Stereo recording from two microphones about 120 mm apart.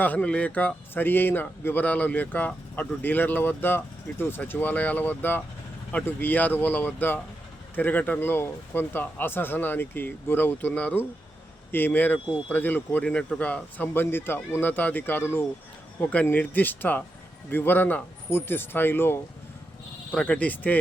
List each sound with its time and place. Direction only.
0.0 s a man's voice: 10° left (ahead or behind)